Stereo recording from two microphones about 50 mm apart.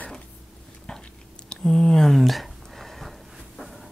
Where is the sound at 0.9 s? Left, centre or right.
Centre.